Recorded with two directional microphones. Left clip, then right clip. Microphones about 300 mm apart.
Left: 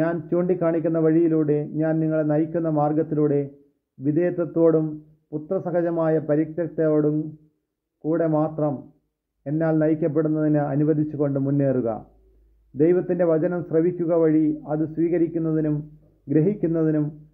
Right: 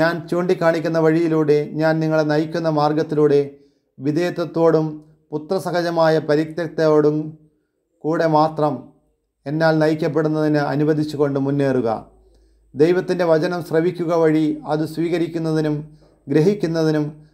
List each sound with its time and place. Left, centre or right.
0.0 s a man's voice: centre